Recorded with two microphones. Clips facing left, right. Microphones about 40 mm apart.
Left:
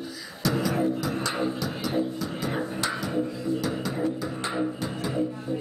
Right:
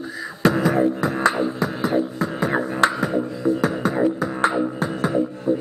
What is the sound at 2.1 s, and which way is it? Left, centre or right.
Music, right.